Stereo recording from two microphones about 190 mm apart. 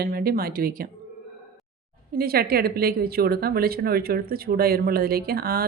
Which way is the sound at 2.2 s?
55° right (ahead or behind).